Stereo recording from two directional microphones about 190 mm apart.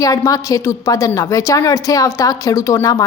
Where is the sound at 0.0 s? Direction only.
15° left (ahead or behind).